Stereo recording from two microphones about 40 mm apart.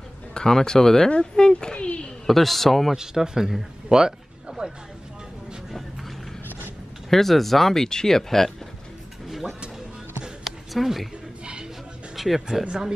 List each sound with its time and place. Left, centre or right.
0.3 s speech: centre
2.2 s a man's voice: centre
2.9 s speech: centre
7.1 s speech: centre
10.4 s a sound: centre
12.2 s speech: centre
12.6 s speech: centre